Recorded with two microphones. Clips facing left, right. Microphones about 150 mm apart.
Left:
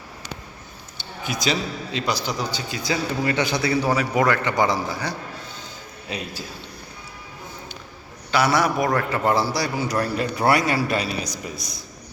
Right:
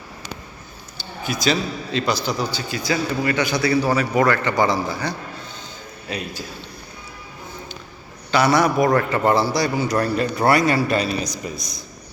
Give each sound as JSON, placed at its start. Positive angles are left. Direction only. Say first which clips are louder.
{"t": 1.2, "sound": "a man's voice", "louder": "right 3 dB", "side_deg": 20}
{"t": 6.1, "sound": "a man's voice", "louder": "right 2 dB", "side_deg": 25}
{"t": 8.3, "sound": "a man's voice", "louder": "right 3 dB", "side_deg": 5}